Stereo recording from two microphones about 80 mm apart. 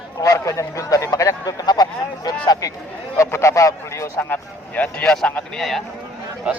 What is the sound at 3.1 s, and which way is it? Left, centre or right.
Speech, left.